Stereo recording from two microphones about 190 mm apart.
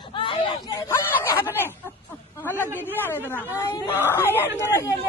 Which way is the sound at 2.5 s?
10° left (ahead or behind).